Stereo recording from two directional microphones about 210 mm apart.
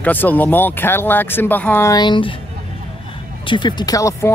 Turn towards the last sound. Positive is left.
turn(degrees=15)  # may be behind; listen again after turning